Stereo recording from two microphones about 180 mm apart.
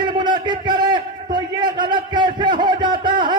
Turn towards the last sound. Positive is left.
turn(degrees=-25)  # may be behind; listen again after turning